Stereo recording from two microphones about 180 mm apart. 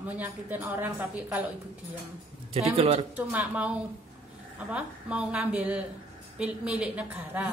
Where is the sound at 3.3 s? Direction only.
5° right (ahead or behind).